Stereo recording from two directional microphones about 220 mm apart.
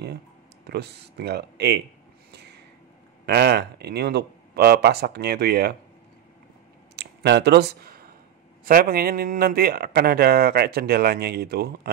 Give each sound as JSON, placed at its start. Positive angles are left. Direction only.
{"t": 0.7, "sound": "speech", "side_deg": -50}
{"t": 3.3, "sound": "speech", "side_deg": -50}
{"t": 7.0, "sound": "a sound", "side_deg": -50}
{"t": 8.6, "sound": "speech", "side_deg": -40}